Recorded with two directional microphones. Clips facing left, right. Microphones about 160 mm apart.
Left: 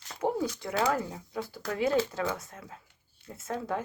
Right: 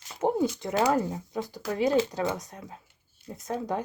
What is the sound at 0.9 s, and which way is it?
Speech, 35° right (ahead or behind).